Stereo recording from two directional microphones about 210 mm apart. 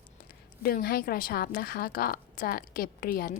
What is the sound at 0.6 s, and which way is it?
A woman's voice, 45° left (ahead or behind).